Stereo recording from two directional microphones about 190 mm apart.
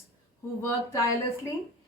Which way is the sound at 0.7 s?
15° left (ahead or behind).